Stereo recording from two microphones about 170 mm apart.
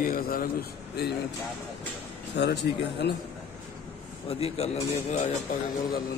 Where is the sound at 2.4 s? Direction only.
75° left (ahead or behind).